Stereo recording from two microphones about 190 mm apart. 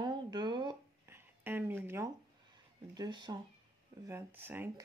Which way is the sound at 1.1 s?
10° right (ahead or behind).